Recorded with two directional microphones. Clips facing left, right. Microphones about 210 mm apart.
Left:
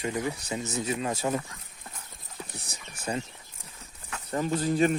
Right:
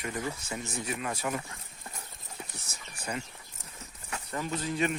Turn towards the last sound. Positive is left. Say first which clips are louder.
# left 6 dB
turn(degrees=35)  # may be behind; listen again after turning